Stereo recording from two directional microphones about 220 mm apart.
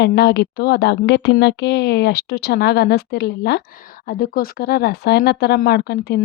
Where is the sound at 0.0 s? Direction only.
50° left (ahead or behind).